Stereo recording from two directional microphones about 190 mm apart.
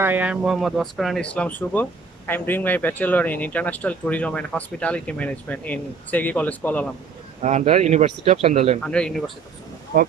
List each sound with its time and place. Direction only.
0.0 s speech: 10° right (ahead or behind); by 6.9 s 10° left (ahead or behind)
7.4 s speech: 35° right (ahead or behind)
8.8 s speech: 5° left (ahead or behind)
9.9 s speech: 55° right (ahead or behind)